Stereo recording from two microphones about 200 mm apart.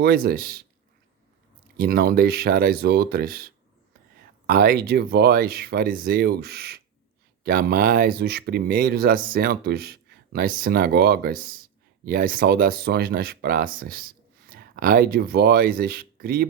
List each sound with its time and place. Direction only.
0.0 s speech: 50° right (ahead or behind)
1.8 s speech: 50° right (ahead or behind)
4.4 s speech: 50° right (ahead or behind)